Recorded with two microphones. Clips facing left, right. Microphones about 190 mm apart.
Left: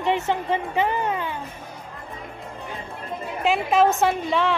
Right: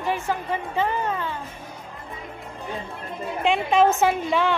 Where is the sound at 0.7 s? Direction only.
15° left (ahead or behind).